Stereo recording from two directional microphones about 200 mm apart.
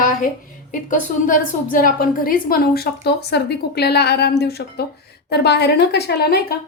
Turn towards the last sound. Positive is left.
turn(degrees=50)  # may be behind; listen again after turning